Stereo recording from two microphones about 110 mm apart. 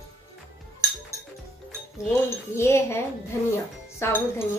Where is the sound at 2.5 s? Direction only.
25° left (ahead or behind).